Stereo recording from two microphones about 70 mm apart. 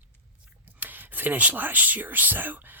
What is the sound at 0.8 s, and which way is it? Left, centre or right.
Speech, right.